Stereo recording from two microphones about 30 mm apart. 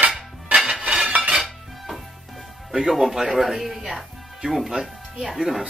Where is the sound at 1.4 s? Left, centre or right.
Centre.